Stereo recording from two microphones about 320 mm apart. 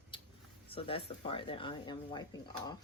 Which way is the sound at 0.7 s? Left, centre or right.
Centre.